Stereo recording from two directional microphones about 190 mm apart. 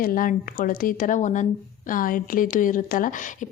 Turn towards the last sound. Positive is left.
turn(degrees=45)  # may be behind; listen again after turning